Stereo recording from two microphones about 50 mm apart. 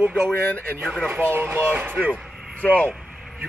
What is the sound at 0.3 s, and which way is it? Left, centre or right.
Speech, left.